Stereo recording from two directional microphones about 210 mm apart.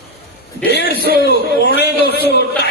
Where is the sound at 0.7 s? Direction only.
50° left (ahead or behind).